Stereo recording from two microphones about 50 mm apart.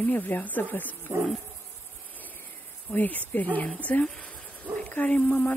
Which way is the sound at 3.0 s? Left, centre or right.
Left.